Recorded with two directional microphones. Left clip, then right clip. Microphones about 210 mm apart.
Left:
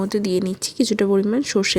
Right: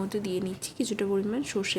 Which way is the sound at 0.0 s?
35° left (ahead or behind).